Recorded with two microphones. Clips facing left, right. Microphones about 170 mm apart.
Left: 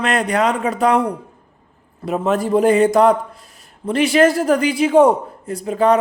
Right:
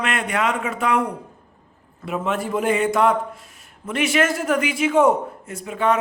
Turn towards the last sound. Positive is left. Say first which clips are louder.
# left 6 dB
turn(degrees=35)  # may be behind; listen again after turning